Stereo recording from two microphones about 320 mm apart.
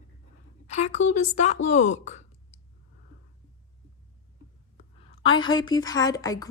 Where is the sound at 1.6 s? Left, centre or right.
Left.